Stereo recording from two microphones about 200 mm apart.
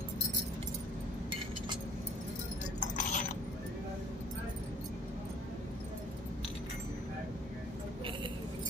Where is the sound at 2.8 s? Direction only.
35° left (ahead or behind).